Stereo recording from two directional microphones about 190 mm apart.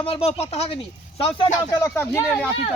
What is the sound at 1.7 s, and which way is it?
Speech, 15° left (ahead or behind).